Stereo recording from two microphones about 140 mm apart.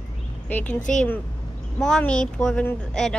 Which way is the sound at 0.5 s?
10° left (ahead or behind).